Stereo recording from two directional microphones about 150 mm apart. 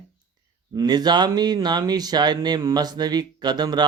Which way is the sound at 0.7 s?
25° right (ahead or behind).